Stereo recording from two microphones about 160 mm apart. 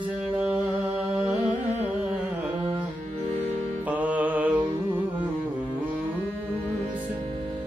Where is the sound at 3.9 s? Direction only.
10° right (ahead or behind).